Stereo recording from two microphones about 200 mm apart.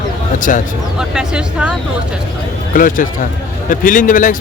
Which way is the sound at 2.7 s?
45° left (ahead or behind).